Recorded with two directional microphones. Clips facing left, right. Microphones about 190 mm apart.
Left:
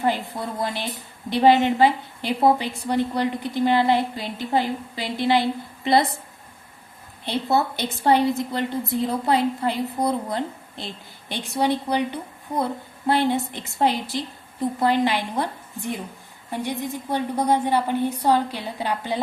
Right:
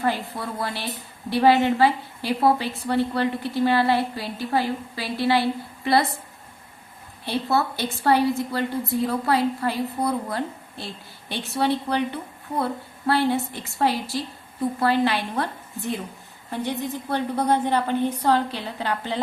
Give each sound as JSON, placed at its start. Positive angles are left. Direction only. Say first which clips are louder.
{"t": 0.0, "sound": "a woman's voice", "louder": "left 1 dB", "side_deg": 20}
{"t": 7.3, "sound": "a woman's voice", "louder": "left 1 dB", "side_deg": 20}